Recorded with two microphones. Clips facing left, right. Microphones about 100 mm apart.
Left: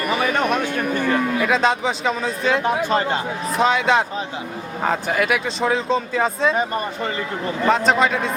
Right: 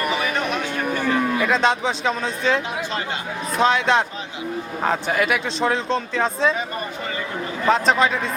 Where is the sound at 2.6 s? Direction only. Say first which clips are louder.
Left 7 dB; 45° left (ahead or behind).